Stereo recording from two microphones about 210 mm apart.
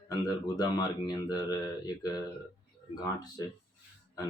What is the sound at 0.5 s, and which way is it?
Speech, 20° left (ahead or behind).